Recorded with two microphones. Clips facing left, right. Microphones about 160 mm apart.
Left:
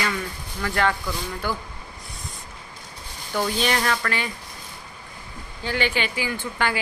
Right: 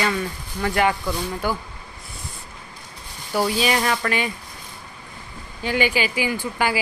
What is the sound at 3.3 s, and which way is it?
Speech, 5° right (ahead or behind).